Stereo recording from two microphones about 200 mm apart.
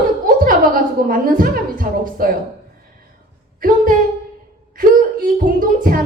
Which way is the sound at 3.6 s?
45° right (ahead or behind).